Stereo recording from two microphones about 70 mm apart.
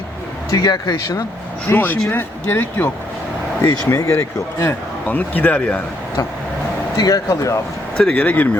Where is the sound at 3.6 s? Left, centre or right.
Left.